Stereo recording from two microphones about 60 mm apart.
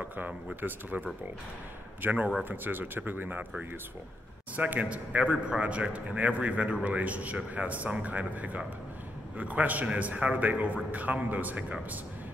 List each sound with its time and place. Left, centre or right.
0.6 s a man's voice: right
4.6 s a man's voice: right